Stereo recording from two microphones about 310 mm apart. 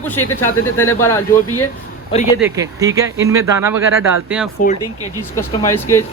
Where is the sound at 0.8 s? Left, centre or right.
Centre.